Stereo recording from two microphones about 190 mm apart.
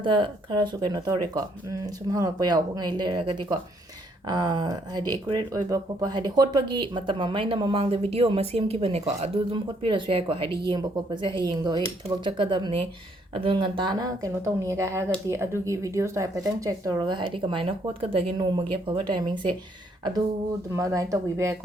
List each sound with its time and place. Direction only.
0.0 s speech: 25° right (ahead or behind)
20.7 s speech: 15° right (ahead or behind)